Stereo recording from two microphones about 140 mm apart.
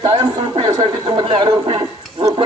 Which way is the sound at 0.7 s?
30° right (ahead or behind).